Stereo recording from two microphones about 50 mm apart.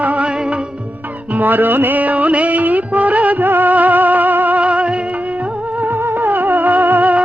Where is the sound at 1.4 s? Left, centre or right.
Right.